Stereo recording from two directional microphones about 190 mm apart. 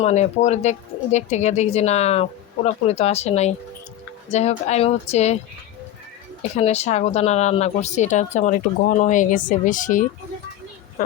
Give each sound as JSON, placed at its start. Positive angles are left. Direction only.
{"t": 0.0, "sound": "speech", "side_deg": 35}
{"t": 6.6, "sound": "speech", "side_deg": 35}